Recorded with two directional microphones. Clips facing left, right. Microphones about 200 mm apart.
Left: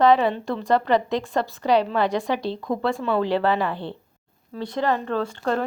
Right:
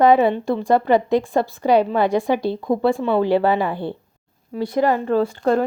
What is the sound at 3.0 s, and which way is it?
Speech, 25° right (ahead or behind).